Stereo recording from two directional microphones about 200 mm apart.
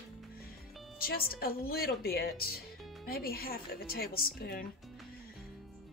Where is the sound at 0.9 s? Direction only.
50° left (ahead or behind).